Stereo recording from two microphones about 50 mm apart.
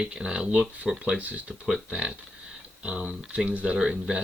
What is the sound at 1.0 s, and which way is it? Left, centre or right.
Speech, right.